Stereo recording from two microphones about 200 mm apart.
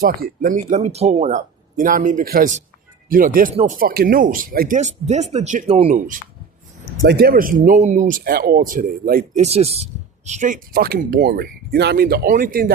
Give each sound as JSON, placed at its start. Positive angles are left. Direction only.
{"t": 0.0, "sound": "speech", "side_deg": -45}
{"t": 3.5, "sound": "speech", "side_deg": -30}
{"t": 3.8, "sound": "speech", "side_deg": -50}
{"t": 7.0, "sound": "speech", "side_deg": -50}
{"t": 10.8, "sound": "speech", "side_deg": -50}